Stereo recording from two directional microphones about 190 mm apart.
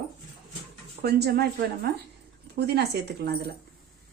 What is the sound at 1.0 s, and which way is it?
Speech, 55° right (ahead or behind).